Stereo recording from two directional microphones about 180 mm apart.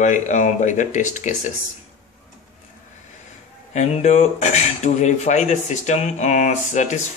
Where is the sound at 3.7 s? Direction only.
40° left (ahead or behind).